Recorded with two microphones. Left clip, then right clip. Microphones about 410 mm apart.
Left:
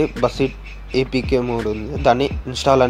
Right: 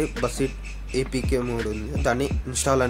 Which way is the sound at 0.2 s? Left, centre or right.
Right.